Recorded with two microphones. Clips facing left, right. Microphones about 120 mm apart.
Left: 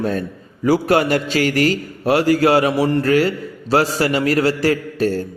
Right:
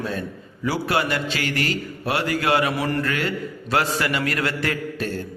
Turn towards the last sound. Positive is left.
turn(degrees=35)  # may be behind; listen again after turning